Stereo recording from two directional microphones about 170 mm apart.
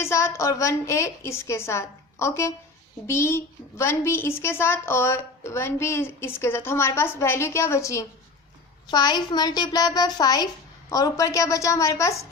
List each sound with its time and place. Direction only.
0.0 s a woman's voice: 15° left (ahead or behind)